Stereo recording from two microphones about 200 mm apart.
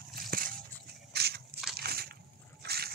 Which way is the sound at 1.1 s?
55° right (ahead or behind).